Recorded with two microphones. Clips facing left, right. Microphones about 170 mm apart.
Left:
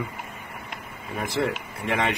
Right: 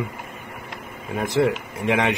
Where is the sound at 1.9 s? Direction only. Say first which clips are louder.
Right 4 dB; 15° right (ahead or behind).